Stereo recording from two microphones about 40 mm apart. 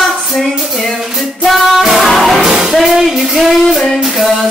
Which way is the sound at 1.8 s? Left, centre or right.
Centre.